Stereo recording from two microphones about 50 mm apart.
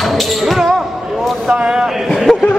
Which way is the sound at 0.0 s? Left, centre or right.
Centre.